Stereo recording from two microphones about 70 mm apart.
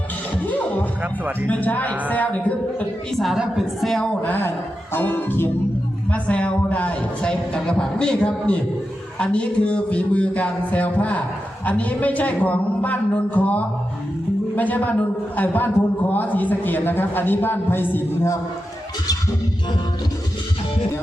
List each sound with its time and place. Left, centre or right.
1.0 s speech: right
1.5 s a man's voice: left
3.1 s a woman's voice: centre
3.3 s a woman's voice: centre
3.8 s a man's voice: centre
4.2 s a man's voice: left
6.1 s a man's voice: centre